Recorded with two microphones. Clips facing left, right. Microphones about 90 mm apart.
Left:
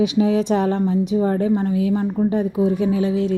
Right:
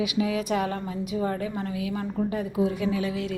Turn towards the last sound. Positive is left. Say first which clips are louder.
# left 9 dB
turn(degrees=30)  # may be behind; listen again after turning